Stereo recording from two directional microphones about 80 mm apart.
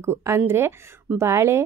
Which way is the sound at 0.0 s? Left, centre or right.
Right.